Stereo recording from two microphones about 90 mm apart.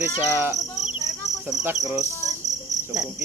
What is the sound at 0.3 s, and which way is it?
Cricket, 30° right (ahead or behind).